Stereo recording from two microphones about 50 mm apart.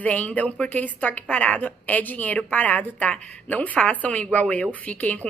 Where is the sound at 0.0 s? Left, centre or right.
Left.